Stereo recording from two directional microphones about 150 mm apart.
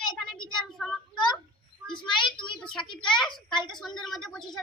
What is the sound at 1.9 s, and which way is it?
Speech, 30° left (ahead or behind).